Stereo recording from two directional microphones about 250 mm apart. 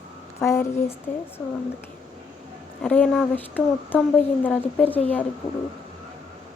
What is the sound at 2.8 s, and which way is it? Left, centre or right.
Speech, centre.